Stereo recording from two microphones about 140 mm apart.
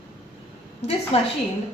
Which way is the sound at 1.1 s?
45° left (ahead or behind).